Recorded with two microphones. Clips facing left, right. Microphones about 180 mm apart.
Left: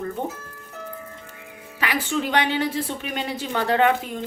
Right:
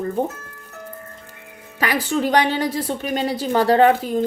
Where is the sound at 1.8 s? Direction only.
40° right (ahead or behind).